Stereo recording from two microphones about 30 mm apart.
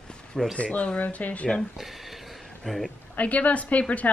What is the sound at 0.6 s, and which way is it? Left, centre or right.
Speech, left.